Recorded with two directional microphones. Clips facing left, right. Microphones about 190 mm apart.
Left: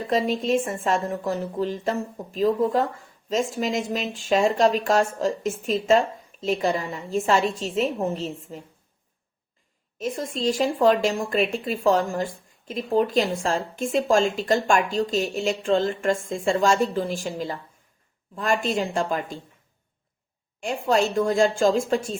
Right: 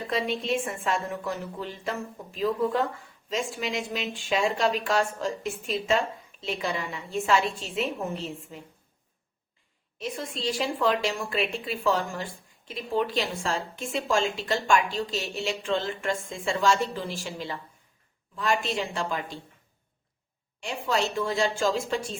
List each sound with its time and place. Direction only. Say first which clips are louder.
0.1 s a woman's voice: left 6 dB; 40° left (ahead or behind)
10.0 s a woman's voice: left 6 dB; 45° left (ahead or behind)
20.6 s a woman's voice: left 6 dB; 50° left (ahead or behind)